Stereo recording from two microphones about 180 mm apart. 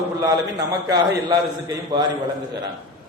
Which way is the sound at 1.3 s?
20° right (ahead or behind).